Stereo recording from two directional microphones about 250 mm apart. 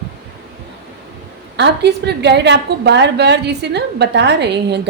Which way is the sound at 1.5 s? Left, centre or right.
Right.